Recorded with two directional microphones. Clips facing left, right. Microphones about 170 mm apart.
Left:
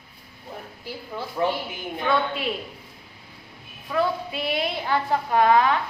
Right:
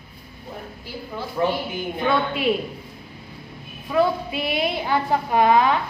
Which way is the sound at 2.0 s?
15° right (ahead or behind).